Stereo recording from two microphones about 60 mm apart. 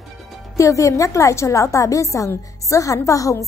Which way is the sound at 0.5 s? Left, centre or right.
Left.